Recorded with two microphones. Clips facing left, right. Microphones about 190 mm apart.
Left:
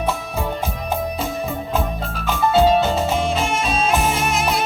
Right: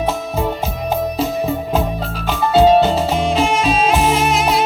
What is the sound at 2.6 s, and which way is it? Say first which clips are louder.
Music: right 5 dB; 25° right (ahead or behind).